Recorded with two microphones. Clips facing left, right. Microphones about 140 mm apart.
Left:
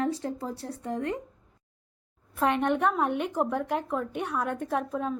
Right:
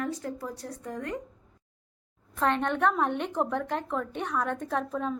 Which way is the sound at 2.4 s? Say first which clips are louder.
Left 1 dB; 10° left (ahead or behind).